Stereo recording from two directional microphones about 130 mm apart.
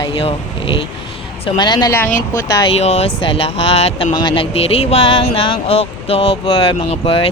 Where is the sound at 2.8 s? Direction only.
55° left (ahead or behind).